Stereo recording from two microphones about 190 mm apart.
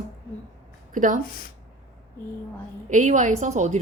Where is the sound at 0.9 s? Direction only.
40° right (ahead or behind).